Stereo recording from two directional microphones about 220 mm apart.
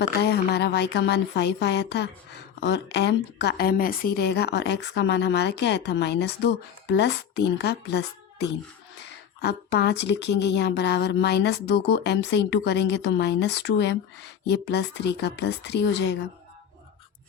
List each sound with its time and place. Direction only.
0.2 s speech: 50° left (ahead or behind)